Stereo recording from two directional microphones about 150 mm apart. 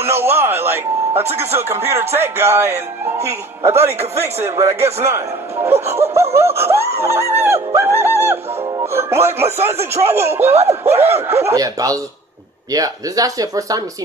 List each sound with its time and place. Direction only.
0.0 s speech: 15° right (ahead or behind)
1.1 s speech: 45° right (ahead or behind)
1.5 s a man's voice: 15° right (ahead or behind)
6.3 s music: 15° right (ahead or behind)
9.9 s a man's voice: 20° right (ahead or behind)